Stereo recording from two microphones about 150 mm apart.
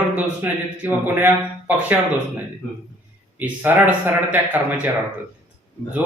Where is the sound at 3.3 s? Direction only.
10° right (ahead or behind).